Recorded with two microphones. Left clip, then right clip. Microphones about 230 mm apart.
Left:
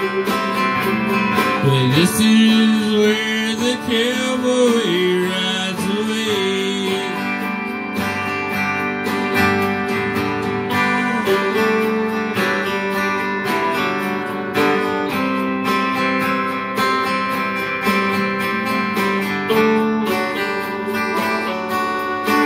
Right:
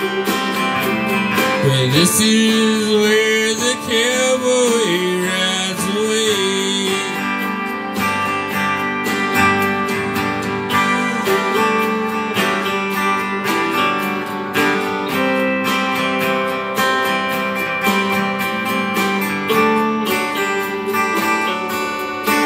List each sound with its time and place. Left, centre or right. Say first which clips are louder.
1.7 s music: right 1 dB; right